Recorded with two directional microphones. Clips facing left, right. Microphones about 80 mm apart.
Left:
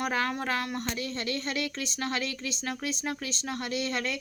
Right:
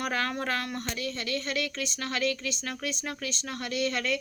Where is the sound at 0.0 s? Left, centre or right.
Centre.